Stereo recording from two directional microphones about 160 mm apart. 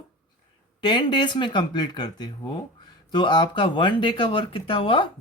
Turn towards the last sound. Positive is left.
turn(degrees=35)  # may be behind; listen again after turning